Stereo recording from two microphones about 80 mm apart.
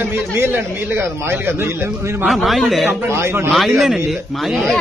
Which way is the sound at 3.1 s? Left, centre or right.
Right.